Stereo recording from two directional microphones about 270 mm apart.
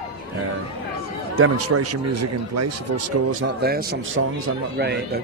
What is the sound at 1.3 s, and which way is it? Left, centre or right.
A man's voice, right.